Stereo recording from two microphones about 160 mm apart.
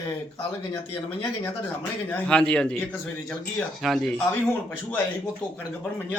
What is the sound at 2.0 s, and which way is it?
Speech, 5° left (ahead or behind).